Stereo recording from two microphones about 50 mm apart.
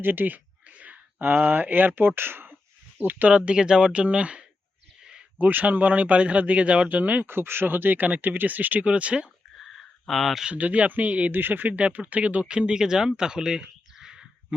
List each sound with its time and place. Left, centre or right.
0.0 s a sound: right
1.5 s speech: right
3.0 s speech: right
3.3 s speech: centre
5.4 s speech: right
7.3 s speech: right
8.9 s speech: right
10.1 s speech: centre
10.5 s speech: right
11.3 s speech: right
11.8 s speech: right; by 14.3 s centre